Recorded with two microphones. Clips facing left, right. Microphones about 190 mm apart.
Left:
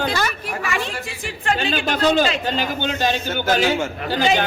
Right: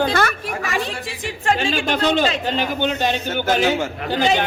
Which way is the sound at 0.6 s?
35° right (ahead or behind).